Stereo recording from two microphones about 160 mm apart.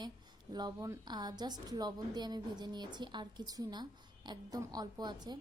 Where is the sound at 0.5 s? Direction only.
25° right (ahead or behind).